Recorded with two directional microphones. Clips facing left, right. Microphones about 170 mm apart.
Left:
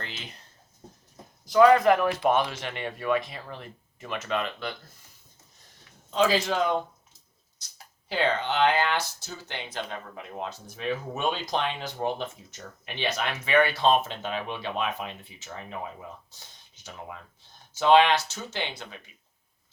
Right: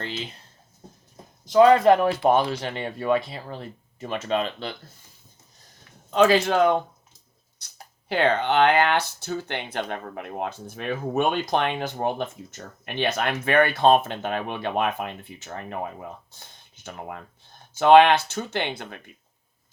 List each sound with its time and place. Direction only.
1.5 s speech: 25° right (ahead or behind)
6.1 s speech: 60° right (ahead or behind)
7.6 s a sound: 60° right (ahead or behind)
8.1 s speech: 60° right (ahead or behind)